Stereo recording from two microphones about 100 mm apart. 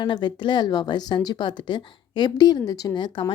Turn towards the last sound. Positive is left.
turn(degrees=55)  # may be behind; listen again after turning